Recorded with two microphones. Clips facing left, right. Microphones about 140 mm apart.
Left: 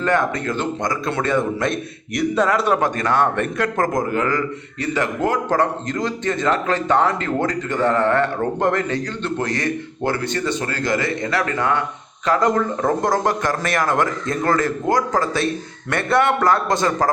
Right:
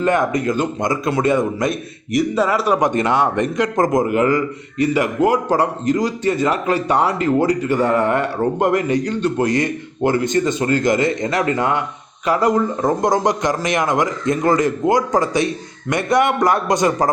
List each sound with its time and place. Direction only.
0.0 s a man's voice: 15° right (ahead or behind)
2.1 s speech: 5° right (ahead or behind)
2.8 s a man's voice: 20° right (ahead or behind)